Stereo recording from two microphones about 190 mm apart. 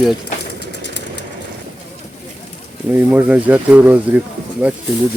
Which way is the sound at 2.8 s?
10° right (ahead or behind).